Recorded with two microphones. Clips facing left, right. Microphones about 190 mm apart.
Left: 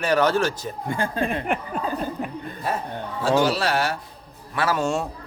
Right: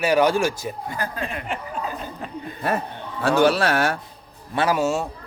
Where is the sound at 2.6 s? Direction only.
65° right (ahead or behind).